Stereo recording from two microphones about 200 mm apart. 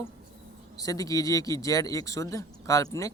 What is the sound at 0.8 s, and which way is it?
Speech, 20° left (ahead or behind).